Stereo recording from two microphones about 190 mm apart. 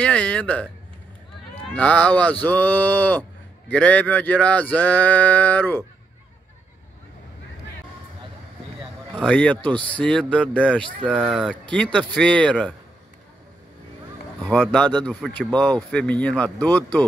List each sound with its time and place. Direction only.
0.0 s a man's voice: 5° left (ahead or behind)
1.7 s a man's voice: 5° left (ahead or behind)
9.1 s a man's voice: 5° left (ahead or behind)
14.5 s a man's voice: 5° left (ahead or behind)